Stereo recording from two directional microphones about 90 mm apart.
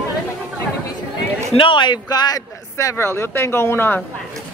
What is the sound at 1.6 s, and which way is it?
A man's voice, 65° left (ahead or behind).